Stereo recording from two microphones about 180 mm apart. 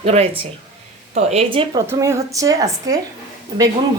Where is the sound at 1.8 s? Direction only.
15° right (ahead or behind).